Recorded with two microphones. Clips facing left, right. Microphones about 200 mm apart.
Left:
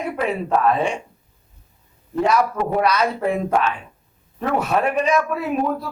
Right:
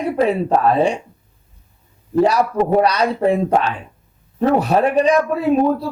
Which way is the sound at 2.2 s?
35° right (ahead or behind).